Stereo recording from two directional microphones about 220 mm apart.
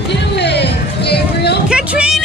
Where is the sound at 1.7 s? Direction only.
5° right (ahead or behind).